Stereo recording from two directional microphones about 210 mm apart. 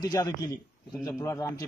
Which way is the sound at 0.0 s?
15° left (ahead or behind).